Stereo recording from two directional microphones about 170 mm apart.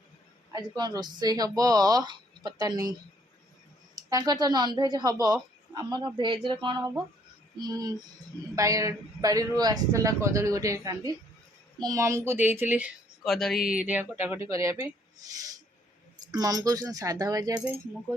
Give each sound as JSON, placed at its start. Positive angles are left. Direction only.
{"t": 0.5, "sound": "speech", "side_deg": -25}
{"t": 3.9, "sound": "speech", "side_deg": -20}
{"t": 16.2, "sound": "speech", "side_deg": -20}